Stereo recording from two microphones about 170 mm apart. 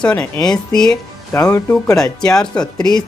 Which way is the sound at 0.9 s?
20° left (ahead or behind).